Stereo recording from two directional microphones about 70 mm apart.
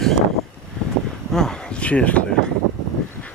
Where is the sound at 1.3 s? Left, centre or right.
Centre.